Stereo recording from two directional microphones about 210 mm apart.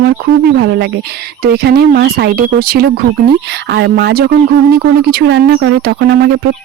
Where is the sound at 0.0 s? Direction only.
50° right (ahead or behind).